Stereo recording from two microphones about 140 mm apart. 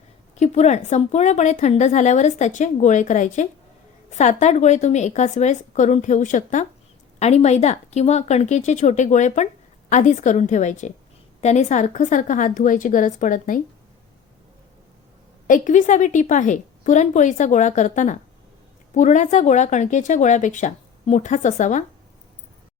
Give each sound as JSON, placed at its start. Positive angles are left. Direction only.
{"t": 0.3, "sound": "a woman's voice", "side_deg": 55}
{"t": 7.2, "sound": "a woman's voice", "side_deg": 50}
{"t": 15.4, "sound": "a woman's voice", "side_deg": 65}